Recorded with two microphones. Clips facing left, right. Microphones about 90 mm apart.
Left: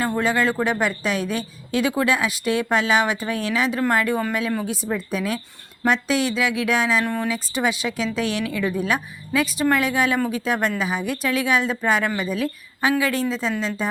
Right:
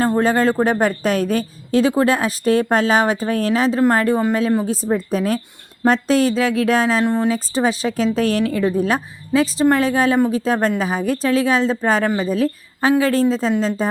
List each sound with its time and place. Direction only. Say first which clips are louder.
0.0 s a woman's voice: right 5 dB; 35° right (ahead or behind)
7.0 s speech: right 6 dB; 25° right (ahead or behind)
7.3 s a woman's voice: right 5 dB; 35° right (ahead or behind)